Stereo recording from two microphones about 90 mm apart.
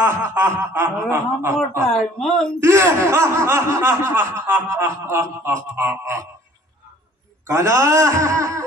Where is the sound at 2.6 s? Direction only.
30° right (ahead or behind).